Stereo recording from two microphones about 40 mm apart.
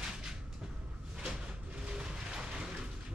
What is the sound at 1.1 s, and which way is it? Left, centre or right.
Cupboard open or close, centre.